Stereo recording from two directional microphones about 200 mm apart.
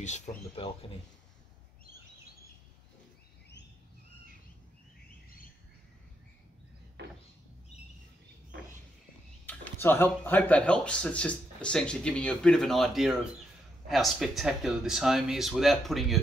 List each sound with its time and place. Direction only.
0.0 s speech: 35° left (ahead or behind)
7.0 s a sound: 60° right (ahead or behind)
9.5 s speech: 10° left (ahead or behind)